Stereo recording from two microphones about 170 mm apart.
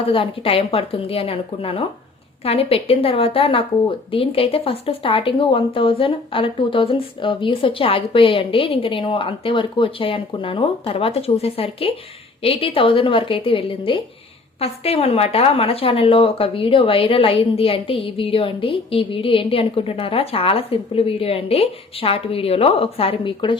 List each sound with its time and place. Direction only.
0.0 s a woman's voice: 30° left (ahead or behind)